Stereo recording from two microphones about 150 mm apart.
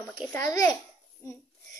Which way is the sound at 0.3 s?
20° left (ahead or behind).